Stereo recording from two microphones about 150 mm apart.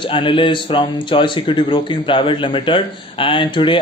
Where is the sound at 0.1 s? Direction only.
35° left (ahead or behind).